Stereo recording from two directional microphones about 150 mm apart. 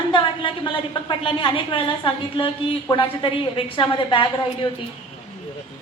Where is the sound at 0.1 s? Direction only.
30° left (ahead or behind).